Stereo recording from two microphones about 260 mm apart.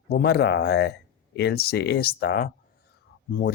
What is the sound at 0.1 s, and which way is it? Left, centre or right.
Speech, left.